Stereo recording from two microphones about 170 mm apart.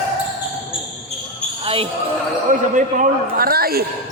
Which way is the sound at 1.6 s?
35° right (ahead or behind).